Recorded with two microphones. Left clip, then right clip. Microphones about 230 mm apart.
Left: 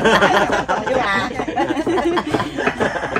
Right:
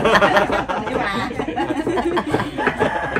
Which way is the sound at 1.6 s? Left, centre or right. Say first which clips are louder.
Left 3 dB; left.